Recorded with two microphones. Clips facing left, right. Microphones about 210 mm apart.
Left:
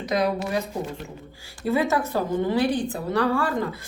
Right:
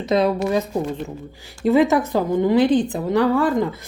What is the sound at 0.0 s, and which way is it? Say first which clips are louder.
Speech: right 5 dB; 25° right (ahead or behind).